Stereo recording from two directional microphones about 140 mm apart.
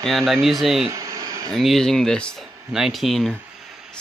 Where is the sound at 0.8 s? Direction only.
25° right (ahead or behind).